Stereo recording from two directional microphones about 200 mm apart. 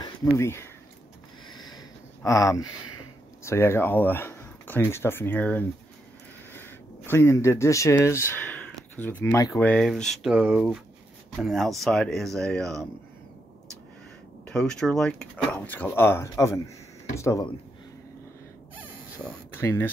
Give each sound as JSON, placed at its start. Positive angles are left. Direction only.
{"t": 0.0, "sound": "speech", "side_deg": 15}
{"t": 1.5, "sound": "a sound", "side_deg": 20}
{"t": 3.4, "sound": "speech", "side_deg": 15}
{"t": 6.5, "sound": "a sound", "side_deg": 10}
{"t": 9.2, "sound": "speech", "side_deg": 15}
{"t": 9.7, "sound": "speech", "side_deg": 5}
{"t": 14.5, "sound": "speech", "side_deg": 5}
{"t": 19.2, "sound": "speech", "side_deg": 10}